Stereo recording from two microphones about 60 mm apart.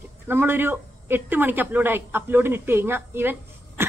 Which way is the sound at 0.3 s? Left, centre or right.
Right.